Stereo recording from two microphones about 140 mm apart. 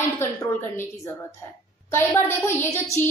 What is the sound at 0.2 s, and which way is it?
Speech, 20° left (ahead or behind).